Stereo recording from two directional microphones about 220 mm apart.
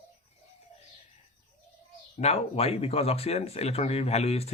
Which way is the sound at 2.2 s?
30° left (ahead or behind).